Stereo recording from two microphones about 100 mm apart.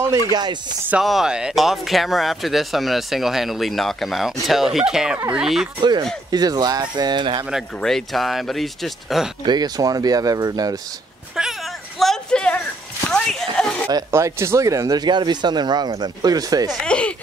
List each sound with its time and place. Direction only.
0.3 s speech: 45° right (ahead or behind)
1.0 s speech: 5° right (ahead or behind)
6.3 s speech: 40° right (ahead or behind)
7.8 s speech: 5° left (ahead or behind)
9.4 s speech: 45° right (ahead or behind)
11.3 s a sound: centre (ahead or behind)
13.8 s speech: 30° right (ahead or behind)
16.7 s speech: 10° left (ahead or behind)